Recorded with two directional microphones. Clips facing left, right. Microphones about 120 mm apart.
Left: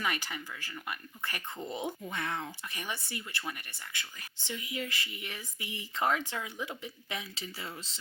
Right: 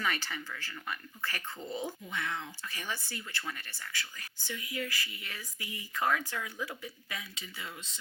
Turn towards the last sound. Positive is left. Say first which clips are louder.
# left 2 dB
turn(degrees=30)  # may be behind; listen again after turning